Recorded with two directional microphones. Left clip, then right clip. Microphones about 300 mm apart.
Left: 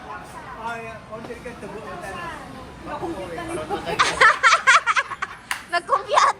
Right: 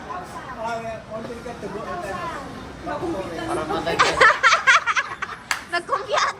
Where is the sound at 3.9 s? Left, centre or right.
Centre.